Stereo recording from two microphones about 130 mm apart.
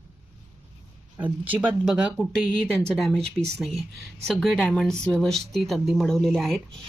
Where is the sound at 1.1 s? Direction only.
10° right (ahead or behind).